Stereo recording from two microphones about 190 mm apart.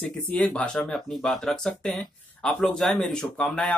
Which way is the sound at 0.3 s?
5° left (ahead or behind).